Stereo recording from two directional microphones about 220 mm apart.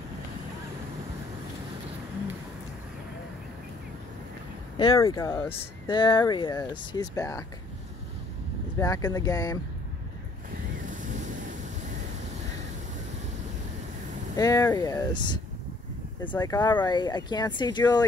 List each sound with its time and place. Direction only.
4.7 s speech: 20° left (ahead or behind)
8.7 s speech: 15° left (ahead or behind)
10.9 s waves: 35° right (ahead or behind)
14.3 s speech: 15° left (ahead or behind)